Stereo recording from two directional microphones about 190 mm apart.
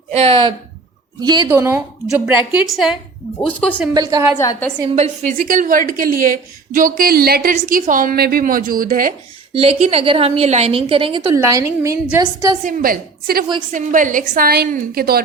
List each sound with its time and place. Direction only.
0.1 s speech: 30° right (ahead or behind)
1.5 s a woman's voice: 10° right (ahead or behind); by 3.8 s 5° left (ahead or behind)
3.9 s speech: 20° right (ahead or behind)
4.4 s a woman's voice: 15° left (ahead or behind)
4.9 s a woman's voice: 40° right (ahead or behind)
9.5 s a woman's voice: 30° right (ahead or behind)
11.3 s a woman's voice: 15° right (ahead or behind)
12.6 s a woman's voice: 50° right (ahead or behind)